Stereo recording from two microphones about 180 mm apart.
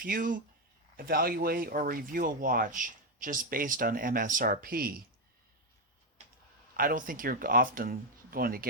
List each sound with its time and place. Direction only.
0.0 s speech: 50° right (ahead or behind)
6.7 s speech: 50° right (ahead or behind)